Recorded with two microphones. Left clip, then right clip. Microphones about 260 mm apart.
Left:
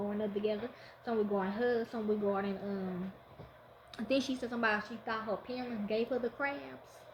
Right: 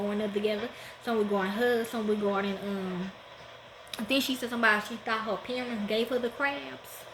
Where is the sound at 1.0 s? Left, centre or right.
Centre.